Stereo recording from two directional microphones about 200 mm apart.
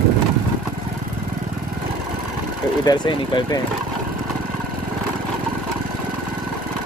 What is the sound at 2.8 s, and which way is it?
Speech, 20° left (ahead or behind).